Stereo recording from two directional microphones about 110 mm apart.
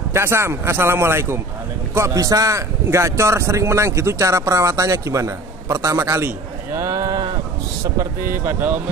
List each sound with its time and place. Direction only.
0.1 s speech: 25° right (ahead or behind); by 7.3 s 40° right (ahead or behind)
8.0 s speech: 20° right (ahead or behind)